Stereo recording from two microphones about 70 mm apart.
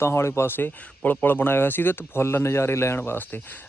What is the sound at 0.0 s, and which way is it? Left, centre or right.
Speech, left.